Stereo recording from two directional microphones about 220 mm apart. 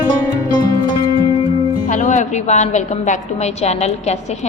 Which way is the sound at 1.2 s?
25° left (ahead or behind).